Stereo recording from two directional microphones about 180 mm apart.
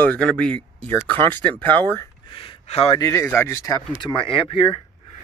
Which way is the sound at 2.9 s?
15° left (ahead or behind).